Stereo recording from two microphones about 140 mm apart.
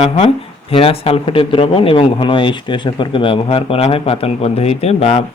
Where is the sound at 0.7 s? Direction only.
45° left (ahead or behind).